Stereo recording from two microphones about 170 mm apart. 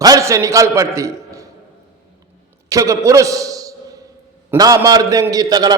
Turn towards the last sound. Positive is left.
turn(degrees=-20)  # may be behind; listen again after turning